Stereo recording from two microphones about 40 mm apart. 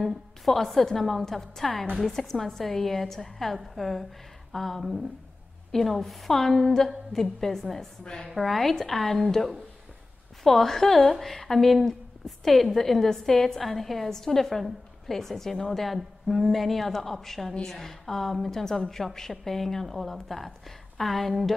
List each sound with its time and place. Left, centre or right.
0.0 s a woman's voice: centre
8.0 s a woman's voice: centre
8.4 s a woman's voice: centre